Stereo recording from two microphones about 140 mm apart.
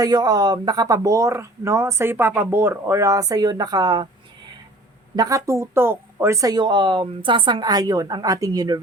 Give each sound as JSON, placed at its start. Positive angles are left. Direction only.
{"t": 0.0, "sound": "speech", "side_deg": -30}
{"t": 5.1, "sound": "speech", "side_deg": -25}